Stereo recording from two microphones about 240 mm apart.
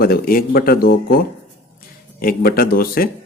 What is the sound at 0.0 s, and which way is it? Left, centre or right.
Speech, left.